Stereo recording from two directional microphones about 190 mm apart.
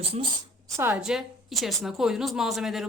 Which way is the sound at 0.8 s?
5° right (ahead or behind).